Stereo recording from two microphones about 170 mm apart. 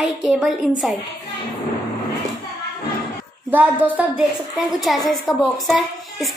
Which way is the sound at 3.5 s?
10° right (ahead or behind).